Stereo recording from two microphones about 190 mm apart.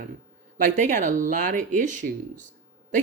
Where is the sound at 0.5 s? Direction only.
40° right (ahead or behind).